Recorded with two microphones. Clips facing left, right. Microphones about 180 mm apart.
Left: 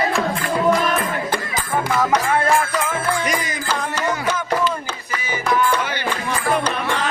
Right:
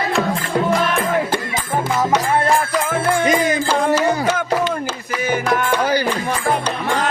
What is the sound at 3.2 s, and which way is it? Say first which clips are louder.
Music: right 7 dB; 25° right (ahead or behind).